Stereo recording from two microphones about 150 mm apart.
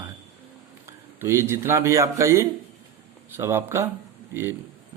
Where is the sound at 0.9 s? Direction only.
15° right (ahead or behind).